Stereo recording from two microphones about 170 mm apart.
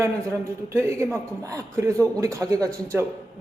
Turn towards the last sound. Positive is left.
turn(degrees=-20)  # may be behind; listen again after turning